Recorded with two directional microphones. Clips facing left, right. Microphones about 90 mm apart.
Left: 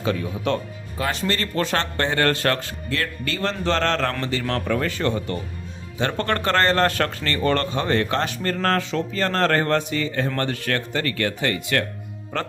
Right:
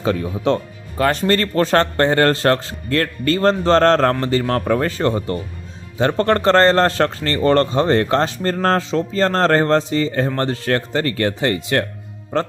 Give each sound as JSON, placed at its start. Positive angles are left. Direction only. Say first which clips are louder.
{"t": 0.0, "sound": "a man's voice", "louder": "right 5 dB", "side_deg": -35}
{"t": 0.9, "sound": "a man's voice", "louder": "right 8 dB", "side_deg": -50}
{"t": 2.3, "sound": "speech", "louder": "right 6 dB", "side_deg": -30}
{"t": 2.9, "sound": "a man's voice", "louder": "right 9 dB", "side_deg": -45}
{"t": 8.8, "sound": "speech", "louder": "right 5 dB", "side_deg": -25}
{"t": 9.1, "sound": "a man's voice", "louder": "right 5 dB", "side_deg": -35}